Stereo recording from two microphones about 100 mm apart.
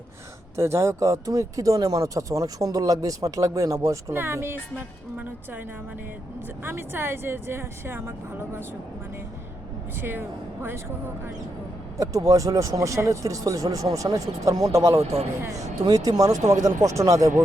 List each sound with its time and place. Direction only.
0.5 s speech: 30° right (ahead or behind)
6.7 s speech: 20° right (ahead or behind)
10.0 s speech: 20° right (ahead or behind)
11.9 s speech: 35° right (ahead or behind)